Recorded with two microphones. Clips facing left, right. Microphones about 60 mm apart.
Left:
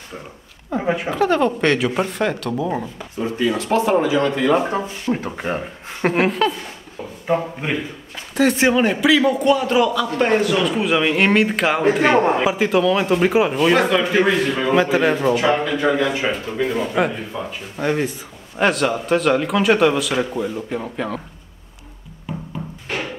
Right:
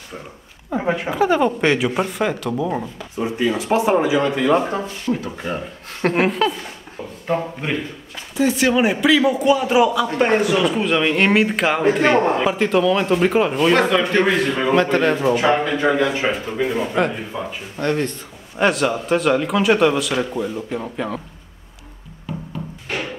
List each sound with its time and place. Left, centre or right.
0.7 s speech: centre
3.2 s speech: centre
5.1 s speech: left
6.0 s speech: centre
8.4 s speech: left
8.7 s speech: centre
9.8 s speech: centre
17.7 s speech: centre
22.3 s music: centre